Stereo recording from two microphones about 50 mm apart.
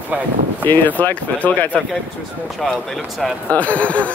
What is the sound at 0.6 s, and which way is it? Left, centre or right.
Speech, left.